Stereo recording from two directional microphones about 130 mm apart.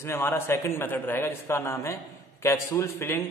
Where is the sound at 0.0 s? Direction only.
20° left (ahead or behind).